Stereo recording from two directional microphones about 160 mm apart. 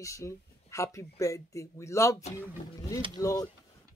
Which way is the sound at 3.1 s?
20° left (ahead or behind).